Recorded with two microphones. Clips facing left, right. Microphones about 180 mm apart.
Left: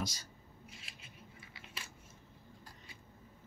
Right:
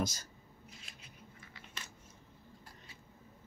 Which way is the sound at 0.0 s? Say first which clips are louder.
Right 5 dB; 50° right (ahead or behind).